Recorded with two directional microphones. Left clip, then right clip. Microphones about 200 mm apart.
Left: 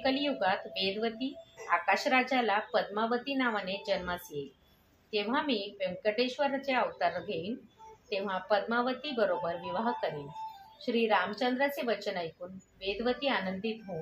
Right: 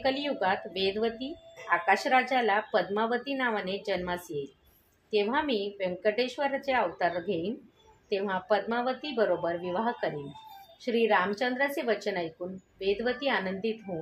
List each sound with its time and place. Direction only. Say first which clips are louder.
0.0 s speech: right 2 dB; 35° right (ahead or behind)